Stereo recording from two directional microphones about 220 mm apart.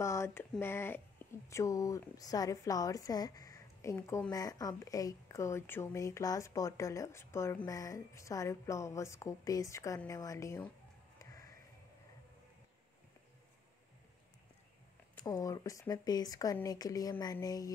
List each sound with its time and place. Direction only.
0.0 s a woman's voice: 10° left (ahead or behind)
15.2 s a woman's voice: 15° left (ahead or behind)